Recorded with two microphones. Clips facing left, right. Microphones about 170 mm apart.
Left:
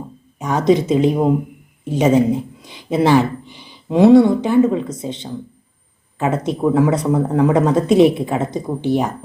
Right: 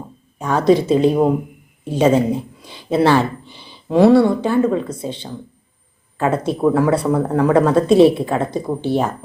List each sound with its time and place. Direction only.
0.4 s speech: 20° left (ahead or behind)